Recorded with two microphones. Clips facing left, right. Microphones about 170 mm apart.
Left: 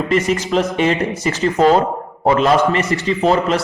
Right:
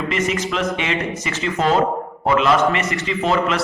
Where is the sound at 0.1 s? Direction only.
40° left (ahead or behind).